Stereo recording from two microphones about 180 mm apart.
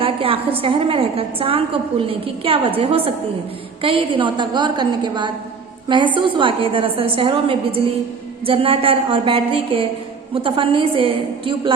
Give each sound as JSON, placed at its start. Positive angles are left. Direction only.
{"t": 0.0, "sound": "a woman's voice", "side_deg": -30}